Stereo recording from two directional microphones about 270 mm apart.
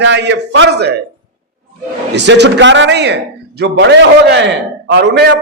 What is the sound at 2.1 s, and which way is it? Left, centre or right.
A man's voice, right.